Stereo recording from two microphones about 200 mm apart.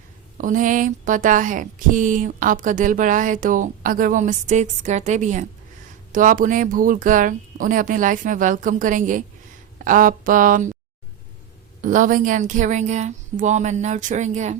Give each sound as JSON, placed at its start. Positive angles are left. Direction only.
{"t": 0.3, "sound": "a woman's voice", "side_deg": -40}
{"t": 11.8, "sound": "speech", "side_deg": -40}